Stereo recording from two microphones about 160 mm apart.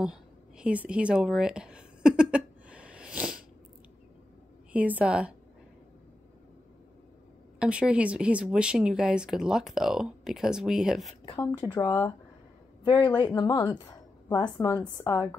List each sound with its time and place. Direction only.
0.0 s a sound: 5° right (ahead or behind)
4.7 s a woman's voice: 10° right (ahead or behind)
7.5 s a woman's voice: 5° right (ahead or behind)
11.5 s a woman's voice: 25° left (ahead or behind)